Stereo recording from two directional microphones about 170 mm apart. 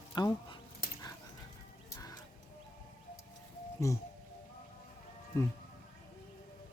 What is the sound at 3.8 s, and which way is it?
Speech, 15° left (ahead or behind).